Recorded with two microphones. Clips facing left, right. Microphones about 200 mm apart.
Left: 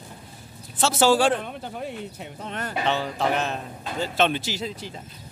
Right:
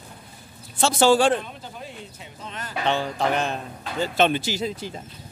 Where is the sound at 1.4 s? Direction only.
60° left (ahead or behind).